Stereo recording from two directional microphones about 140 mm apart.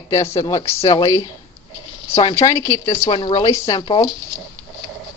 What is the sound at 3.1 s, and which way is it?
Speech, 35° left (ahead or behind).